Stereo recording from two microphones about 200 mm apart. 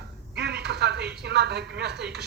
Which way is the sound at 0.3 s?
55° right (ahead or behind).